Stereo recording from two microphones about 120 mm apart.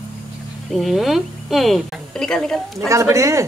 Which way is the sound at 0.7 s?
Centre (ahead or behind).